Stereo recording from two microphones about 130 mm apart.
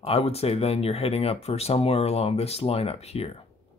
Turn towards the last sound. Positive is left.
turn(degrees=50)  # may be behind; listen again after turning